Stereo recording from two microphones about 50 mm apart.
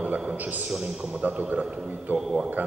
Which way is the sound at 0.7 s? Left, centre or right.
Centre.